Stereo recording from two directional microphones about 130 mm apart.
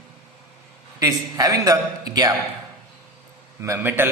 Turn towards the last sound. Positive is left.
turn(degrees=-15)  # may be behind; listen again after turning